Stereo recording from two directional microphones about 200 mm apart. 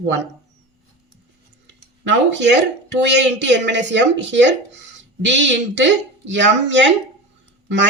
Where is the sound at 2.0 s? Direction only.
60° right (ahead or behind).